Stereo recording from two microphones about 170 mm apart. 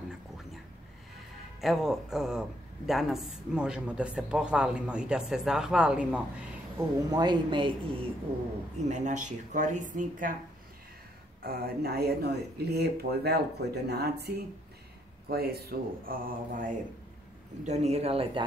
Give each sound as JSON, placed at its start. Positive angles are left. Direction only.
{"t": 1.6, "sound": "a man's voice", "side_deg": 0}
{"t": 7.1, "sound": "speech", "side_deg": -25}
{"t": 8.7, "sound": "speech", "side_deg": -45}
{"t": 11.4, "sound": "speech", "side_deg": -65}
{"t": 17.6, "sound": "speech", "side_deg": -40}